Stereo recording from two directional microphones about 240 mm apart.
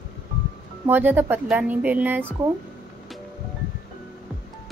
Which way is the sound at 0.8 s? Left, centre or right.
Centre.